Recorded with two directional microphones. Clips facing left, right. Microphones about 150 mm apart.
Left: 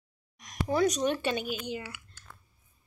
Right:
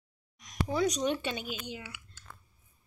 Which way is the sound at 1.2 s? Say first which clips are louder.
Left 5 dB; 60° left (ahead or behind).